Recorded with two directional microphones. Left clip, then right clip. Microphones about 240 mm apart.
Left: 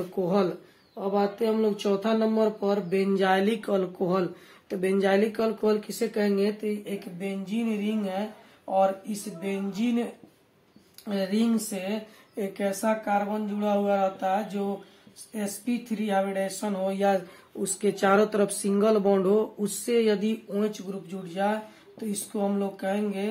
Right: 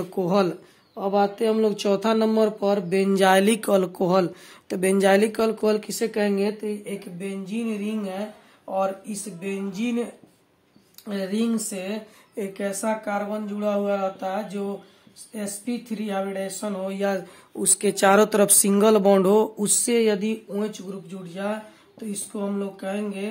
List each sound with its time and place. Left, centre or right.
0.1 s speech: right
6.6 s speech: right
8.7 s speech: right
11.1 s speech: right
17.7 s speech: right; by 23.2 s centre